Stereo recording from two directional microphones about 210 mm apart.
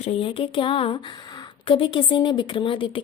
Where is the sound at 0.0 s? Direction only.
30° left (ahead or behind).